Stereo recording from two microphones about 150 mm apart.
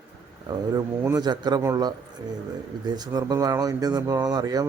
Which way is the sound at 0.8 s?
25° right (ahead or behind).